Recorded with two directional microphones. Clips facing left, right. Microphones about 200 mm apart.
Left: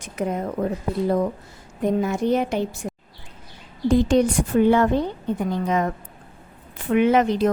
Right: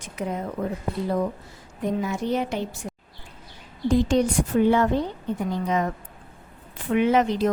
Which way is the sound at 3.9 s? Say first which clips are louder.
Left 3 dB; 60° left (ahead or behind).